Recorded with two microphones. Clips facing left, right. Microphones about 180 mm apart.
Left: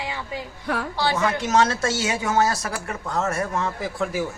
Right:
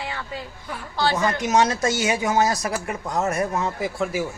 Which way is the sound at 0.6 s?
80° left.